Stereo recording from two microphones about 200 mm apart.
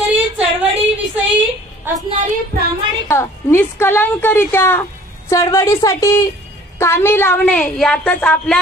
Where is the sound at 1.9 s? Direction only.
10° right (ahead or behind).